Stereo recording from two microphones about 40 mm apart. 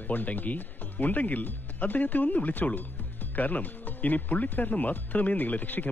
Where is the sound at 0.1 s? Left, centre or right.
Left.